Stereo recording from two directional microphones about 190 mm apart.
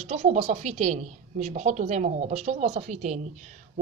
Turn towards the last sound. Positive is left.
turn(degrees=-40)  # may be behind; listen again after turning